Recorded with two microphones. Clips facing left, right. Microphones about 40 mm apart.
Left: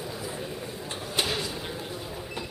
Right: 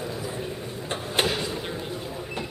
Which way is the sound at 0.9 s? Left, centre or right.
Right.